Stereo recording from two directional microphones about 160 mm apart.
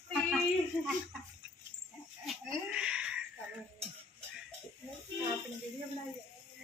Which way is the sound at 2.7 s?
5° right (ahead or behind).